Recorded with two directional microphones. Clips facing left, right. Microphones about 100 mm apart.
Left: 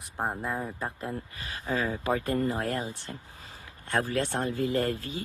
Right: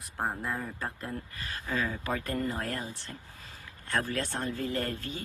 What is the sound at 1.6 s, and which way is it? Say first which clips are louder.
Speech: left 4 dB; 30° left (ahead or behind).